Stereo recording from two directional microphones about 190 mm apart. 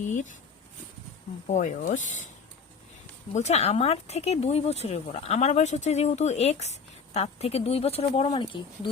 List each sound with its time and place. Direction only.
0.0 s speech: 40° left (ahead or behind)
1.5 s speech: 40° left (ahead or behind)
3.3 s speech: 35° left (ahead or behind)